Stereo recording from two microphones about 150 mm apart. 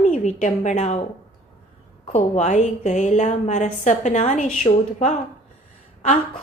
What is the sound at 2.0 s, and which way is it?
A woman's voice, 50° left (ahead or behind).